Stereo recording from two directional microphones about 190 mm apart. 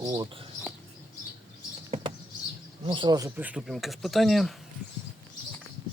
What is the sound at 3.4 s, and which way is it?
Speech, 5° right (ahead or behind).